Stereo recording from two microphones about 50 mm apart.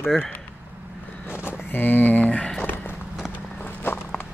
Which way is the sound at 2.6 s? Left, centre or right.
Left.